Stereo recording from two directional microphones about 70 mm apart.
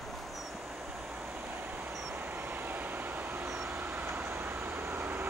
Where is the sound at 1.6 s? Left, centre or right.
Right.